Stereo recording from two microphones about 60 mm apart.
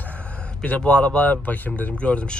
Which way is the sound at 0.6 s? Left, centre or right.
Centre.